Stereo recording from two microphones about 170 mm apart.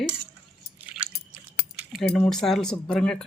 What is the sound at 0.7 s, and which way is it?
Drip, 65° left (ahead or behind).